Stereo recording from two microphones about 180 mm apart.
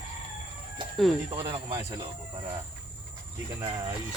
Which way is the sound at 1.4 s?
30° right (ahead or behind).